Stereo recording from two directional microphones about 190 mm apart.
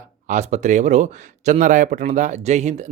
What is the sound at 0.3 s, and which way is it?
Speech, 40° right (ahead or behind).